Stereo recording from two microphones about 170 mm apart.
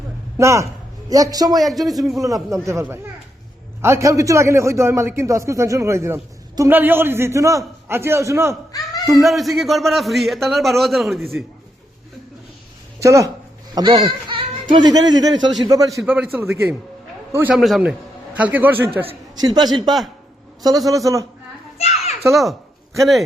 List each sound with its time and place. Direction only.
0.3 s a man's voice: 15° right (ahead or behind)
1.5 s a man's voice: centre (ahead or behind)
2.1 s a man's voice: 20° right (ahead or behind)
9.2 s a man's voice: centre (ahead or behind)
13.0 s a man's voice: 20° right (ahead or behind)
16.0 s a man's voice: 10° right (ahead or behind)
17.5 s a man's voice: centre (ahead or behind)
19.4 s a man's voice: 25° right (ahead or behind)
21.8 s children playing: 40° left (ahead or behind)
22.3 s a man's voice: centre (ahead or behind)